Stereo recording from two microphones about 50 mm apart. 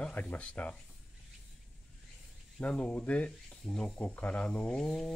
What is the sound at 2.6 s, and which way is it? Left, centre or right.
Speech, left.